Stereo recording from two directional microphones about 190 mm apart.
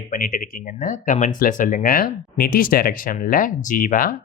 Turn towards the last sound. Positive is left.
turn(degrees=45)  # may be behind; listen again after turning